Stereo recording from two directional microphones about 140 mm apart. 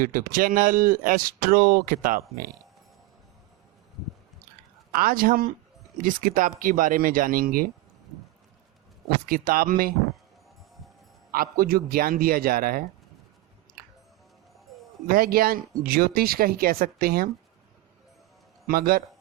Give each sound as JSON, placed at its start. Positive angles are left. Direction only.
{"t": 0.0, "sound": "speech", "side_deg": -80}
{"t": 4.9, "sound": "speech", "side_deg": -90}
{"t": 6.0, "sound": "speech", "side_deg": -75}
{"t": 9.2, "sound": "speech", "side_deg": -90}
{"t": 11.3, "sound": "speech", "side_deg": -90}
{"t": 15.0, "sound": "speech", "side_deg": -90}
{"t": 18.7, "sound": "speech", "side_deg": -90}